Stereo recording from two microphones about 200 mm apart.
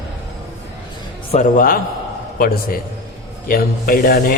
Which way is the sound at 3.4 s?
45° left (ahead or behind).